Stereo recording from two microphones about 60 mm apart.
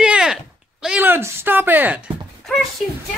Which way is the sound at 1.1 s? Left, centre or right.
Right.